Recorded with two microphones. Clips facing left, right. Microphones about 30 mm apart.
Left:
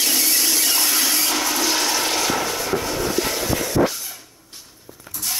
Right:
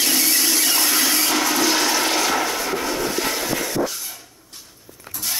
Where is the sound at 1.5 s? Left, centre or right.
Right.